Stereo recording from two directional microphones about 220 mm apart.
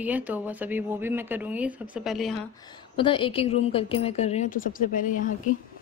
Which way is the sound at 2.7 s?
20° left (ahead or behind).